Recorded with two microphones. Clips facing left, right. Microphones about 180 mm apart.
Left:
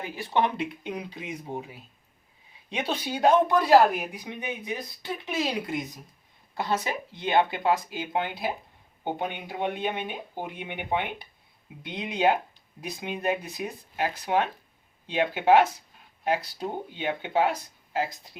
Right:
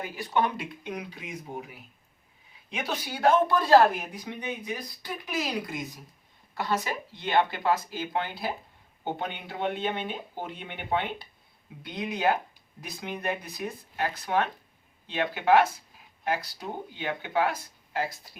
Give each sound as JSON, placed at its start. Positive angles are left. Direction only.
{"t": 0.0, "sound": "speech", "side_deg": 25}